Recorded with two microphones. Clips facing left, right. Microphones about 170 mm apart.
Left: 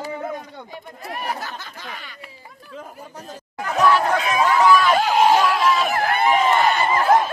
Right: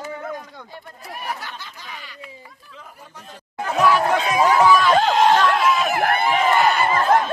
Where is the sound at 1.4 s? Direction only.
45° left (ahead or behind).